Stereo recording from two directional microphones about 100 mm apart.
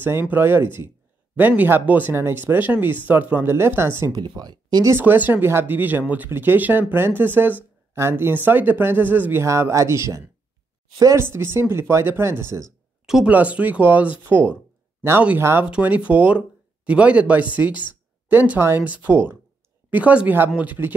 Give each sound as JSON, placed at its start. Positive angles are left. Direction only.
{"t": 0.0, "sound": "speech", "side_deg": -20}
{"t": 4.1, "sound": "speech", "side_deg": -45}
{"t": 4.8, "sound": "speech", "side_deg": -20}
{"t": 13.0, "sound": "a sound", "side_deg": -5}
{"t": 13.3, "sound": "speech", "side_deg": -15}